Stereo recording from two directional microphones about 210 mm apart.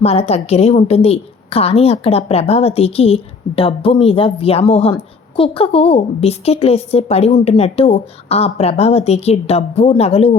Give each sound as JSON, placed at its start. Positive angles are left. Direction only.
{"t": 0.0, "sound": "a woman's voice", "side_deg": 30}